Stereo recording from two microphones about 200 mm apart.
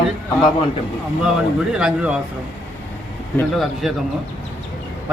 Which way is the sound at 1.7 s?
5° right (ahead or behind).